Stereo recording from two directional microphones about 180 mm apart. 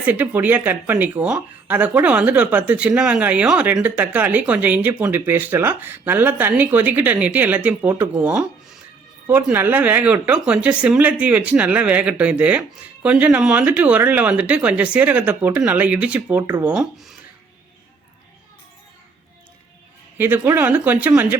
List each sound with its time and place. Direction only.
0.0 s speech: 10° right (ahead or behind)
16.4 s speech: 20° right (ahead or behind)
16.7 s speech: centre (ahead or behind)
20.1 s speech: 10° right (ahead or behind)